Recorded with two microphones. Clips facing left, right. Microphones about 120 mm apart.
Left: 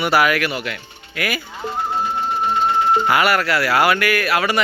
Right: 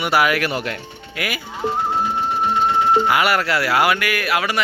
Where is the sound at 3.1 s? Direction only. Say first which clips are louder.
Left 1 dB; 15° right (ahead or behind).